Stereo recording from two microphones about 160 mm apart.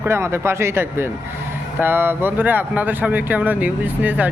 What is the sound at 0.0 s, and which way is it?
Speech, 15° right (ahead or behind).